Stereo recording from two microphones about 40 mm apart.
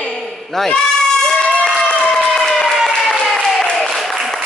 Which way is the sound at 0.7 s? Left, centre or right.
Centre.